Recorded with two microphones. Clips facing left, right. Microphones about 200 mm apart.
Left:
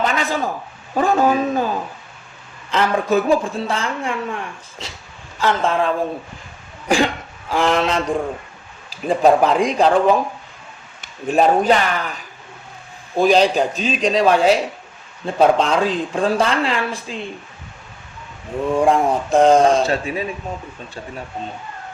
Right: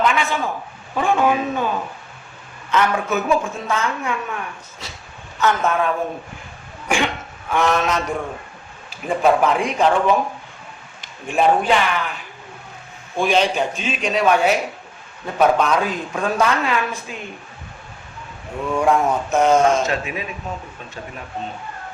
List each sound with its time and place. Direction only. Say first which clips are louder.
0.0 s a sound: even; 35° left (ahead or behind)
0.9 s a man's voice: left 2 dB; 40° left (ahead or behind)
18.7 s speech: left 2 dB; 30° left (ahead or behind)